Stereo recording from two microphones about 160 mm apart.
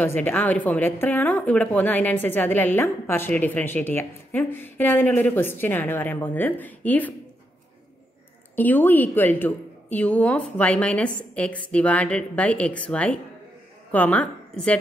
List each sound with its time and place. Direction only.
0.0 s a woman's voice: 10° left (ahead or behind)
8.5 s a woman's voice: 10° left (ahead or behind)